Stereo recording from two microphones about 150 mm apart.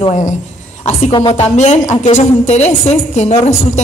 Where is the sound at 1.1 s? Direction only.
35° left (ahead or behind).